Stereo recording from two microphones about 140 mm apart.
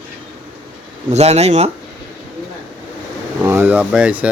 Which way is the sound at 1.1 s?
50° right (ahead or behind).